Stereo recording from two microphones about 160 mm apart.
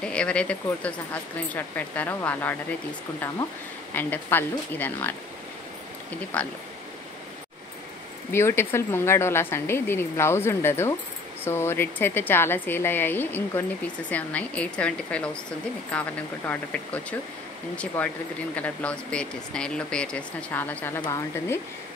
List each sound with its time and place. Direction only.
0.0 s speech: 5° left (ahead or behind)
3.9 s speech: 10° left (ahead or behind)
6.4 s speech: 10° left (ahead or behind)
8.3 s speech: 15° left (ahead or behind)